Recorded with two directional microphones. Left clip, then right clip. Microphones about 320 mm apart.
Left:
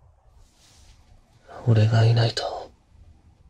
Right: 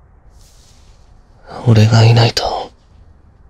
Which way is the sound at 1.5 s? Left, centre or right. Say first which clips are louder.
Right 10 dB; right.